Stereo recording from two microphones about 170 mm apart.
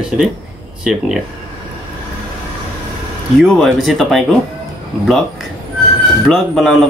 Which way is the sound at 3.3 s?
Centre (ahead or behind).